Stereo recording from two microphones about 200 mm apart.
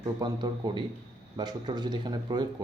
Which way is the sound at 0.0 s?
20° right (ahead or behind).